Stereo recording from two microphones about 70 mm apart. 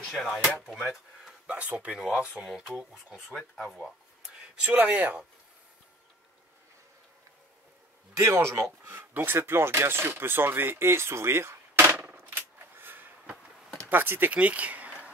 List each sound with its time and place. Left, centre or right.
0.0 s speech: centre
0.8 s a sound: centre
1.6 s speech: right; by 2.8 s centre
2.8 s speech: centre
3.3 s speech: centre
4.4 s speech: centre
8.2 s speech: right
12.1 s a sound: right
13.8 s speech: right